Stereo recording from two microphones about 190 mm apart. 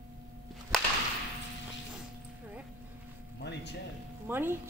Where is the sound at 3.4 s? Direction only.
60° left (ahead or behind).